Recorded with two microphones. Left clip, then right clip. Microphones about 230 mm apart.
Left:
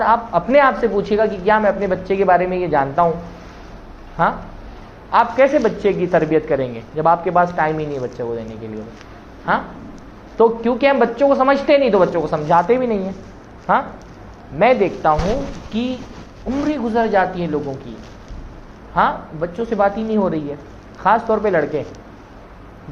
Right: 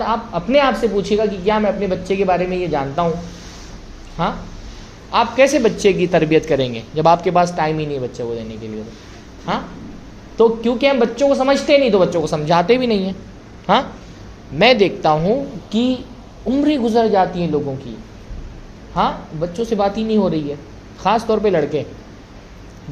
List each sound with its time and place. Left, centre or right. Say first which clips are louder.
0.0 s a man's voice: left 5 dB; right
4.2 s a man's voice: left 4 dB; right
14.6 s a woman's voice: right 1 dB; right
18.9 s a man's voice: left 2 dB; right